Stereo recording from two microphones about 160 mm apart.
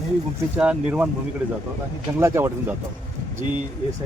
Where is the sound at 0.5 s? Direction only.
5° right (ahead or behind).